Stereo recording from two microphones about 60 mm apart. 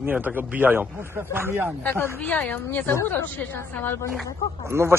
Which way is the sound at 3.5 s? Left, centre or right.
Left.